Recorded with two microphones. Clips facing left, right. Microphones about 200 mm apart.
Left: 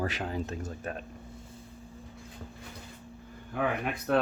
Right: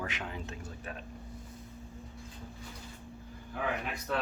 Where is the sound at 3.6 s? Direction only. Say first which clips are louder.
Left 5 dB; 55° left (ahead or behind).